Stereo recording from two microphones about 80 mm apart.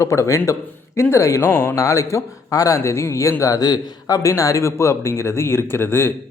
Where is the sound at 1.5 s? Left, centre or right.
Left.